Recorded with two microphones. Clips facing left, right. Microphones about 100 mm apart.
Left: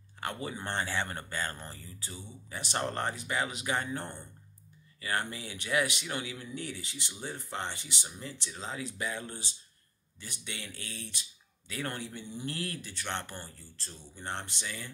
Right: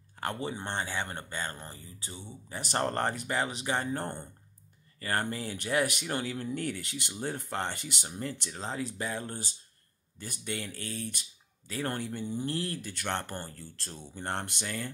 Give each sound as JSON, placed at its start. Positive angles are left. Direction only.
{"t": 0.2, "sound": "speech", "side_deg": -30}
{"t": 2.5, "sound": "speech", "side_deg": -40}
{"t": 8.6, "sound": "speech", "side_deg": -40}
{"t": 12.8, "sound": "speech", "side_deg": -50}
{"t": 13.6, "sound": "speech", "side_deg": -65}